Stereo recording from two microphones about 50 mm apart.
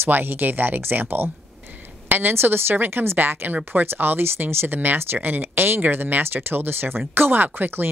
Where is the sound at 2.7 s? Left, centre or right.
Right.